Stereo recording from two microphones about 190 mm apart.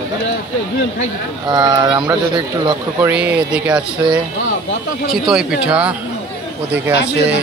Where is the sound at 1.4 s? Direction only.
20° right (ahead or behind).